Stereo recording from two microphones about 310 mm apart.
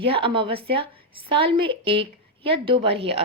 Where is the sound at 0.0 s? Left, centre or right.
Centre.